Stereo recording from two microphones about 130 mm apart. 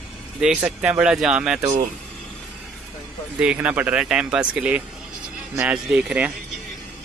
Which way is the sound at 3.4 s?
10° right (ahead or behind).